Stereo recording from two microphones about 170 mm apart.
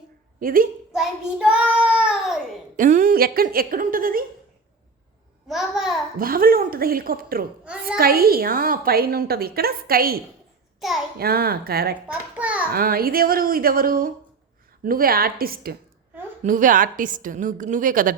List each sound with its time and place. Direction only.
0.3 s a woman's voice: 55° right (ahead or behind)
0.9 s child singing: 5° right (ahead or behind)
2.7 s a woman's voice: 50° right (ahead or behind)
5.5 s a child's voice: centre (ahead or behind)
6.1 s a woman's voice: 60° right (ahead or behind)
7.6 s a child's voice: 5° right (ahead or behind)
7.9 s a woman's voice: 60° right (ahead or behind)
10.8 s a child's voice: centre (ahead or behind)
11.2 s a woman's voice: 65° right (ahead or behind)
12.0 s a child's voice: 10° right (ahead or behind)
12.7 s a woman's voice: 60° right (ahead or behind)